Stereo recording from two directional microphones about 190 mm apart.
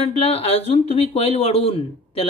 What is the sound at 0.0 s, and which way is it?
Speech, 30° left (ahead or behind).